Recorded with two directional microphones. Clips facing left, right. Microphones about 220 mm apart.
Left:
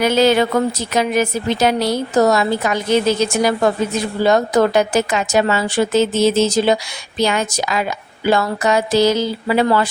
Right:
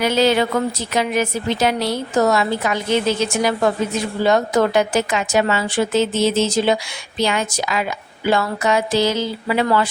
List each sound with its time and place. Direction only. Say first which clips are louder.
0.0 s speech: left 3 dB; 45° left (ahead or behind)